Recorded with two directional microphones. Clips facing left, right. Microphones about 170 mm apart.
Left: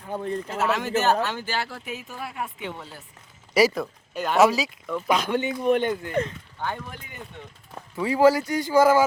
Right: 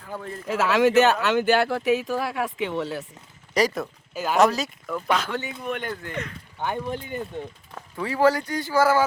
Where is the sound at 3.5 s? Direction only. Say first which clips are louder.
Left 3 dB; 5° left (ahead or behind).